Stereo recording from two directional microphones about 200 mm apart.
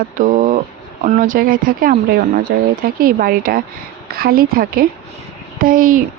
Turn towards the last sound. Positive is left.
turn(degrees=-45)  # may be behind; listen again after turning